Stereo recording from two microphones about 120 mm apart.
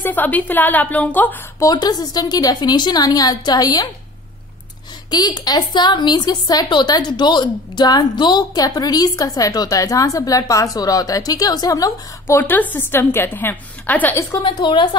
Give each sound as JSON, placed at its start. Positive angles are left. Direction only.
{"t": 0.0, "sound": "a woman's voice", "side_deg": 15}
{"t": 1.6, "sound": "a woman's voice", "side_deg": 30}
{"t": 5.1, "sound": "a woman's voice", "side_deg": 35}
{"t": 12.4, "sound": "a woman's voice", "side_deg": 15}
{"t": 14.4, "sound": "a woman's voice", "side_deg": 40}